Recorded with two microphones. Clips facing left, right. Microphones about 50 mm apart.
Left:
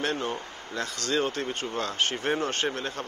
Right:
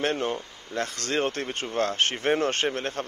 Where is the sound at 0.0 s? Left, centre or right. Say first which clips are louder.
Right 3 dB; right.